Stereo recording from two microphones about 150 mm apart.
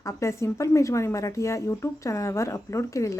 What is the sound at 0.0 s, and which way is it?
Speech, 20° left (ahead or behind).